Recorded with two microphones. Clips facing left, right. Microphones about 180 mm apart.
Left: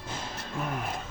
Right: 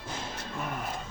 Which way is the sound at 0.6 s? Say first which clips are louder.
Left 3 dB; 5° left (ahead or behind).